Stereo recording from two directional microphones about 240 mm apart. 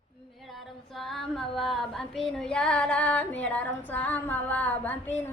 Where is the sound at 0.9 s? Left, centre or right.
Centre.